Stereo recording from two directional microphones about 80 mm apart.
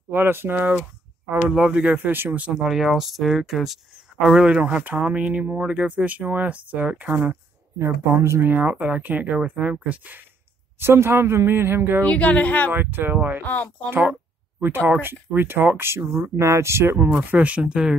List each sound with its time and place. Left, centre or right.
0.1 s speech: right
2.1 s speech: right
2.4 s speech: centre
7.8 s speech: right
8.5 s speech: centre
10.8 s speech: right
12.0 s speech: centre
12.7 s speech: right